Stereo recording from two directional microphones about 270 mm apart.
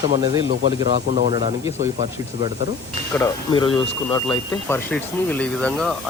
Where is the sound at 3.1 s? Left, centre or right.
Centre.